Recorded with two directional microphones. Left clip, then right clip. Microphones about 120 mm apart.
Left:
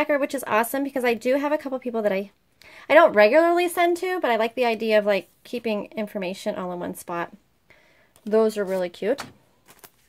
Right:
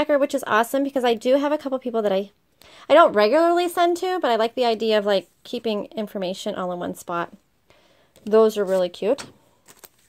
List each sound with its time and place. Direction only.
0.0 s speech: 30° right (ahead or behind)